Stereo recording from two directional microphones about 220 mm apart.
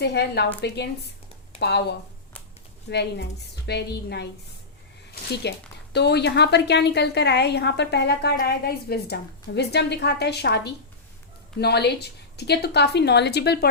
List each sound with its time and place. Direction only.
0.0 s a woman's voice: 50° left (ahead or behind)
5.3 s a woman's voice: 50° left (ahead or behind)